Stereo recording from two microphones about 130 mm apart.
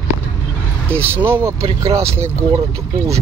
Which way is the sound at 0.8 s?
20° right (ahead or behind).